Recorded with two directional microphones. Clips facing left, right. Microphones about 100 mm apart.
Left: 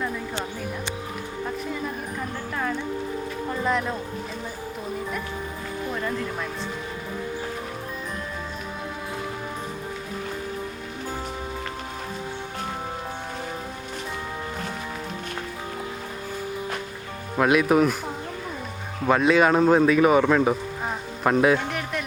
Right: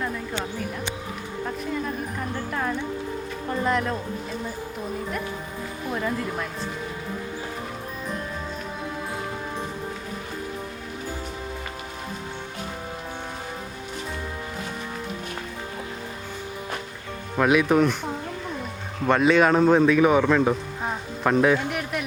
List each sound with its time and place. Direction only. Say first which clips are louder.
3.6 s speech: right 1 dB; centre (ahead or behind)
5.9 s speech: right 2 dB; 5° right (ahead or behind)
17.3 s speech: even; centre (ahead or behind)